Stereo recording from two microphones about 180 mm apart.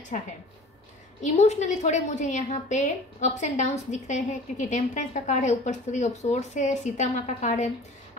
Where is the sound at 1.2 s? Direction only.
40° left (ahead or behind).